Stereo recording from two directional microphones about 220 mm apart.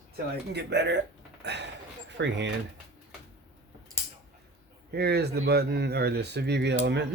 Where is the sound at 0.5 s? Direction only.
50° right (ahead or behind).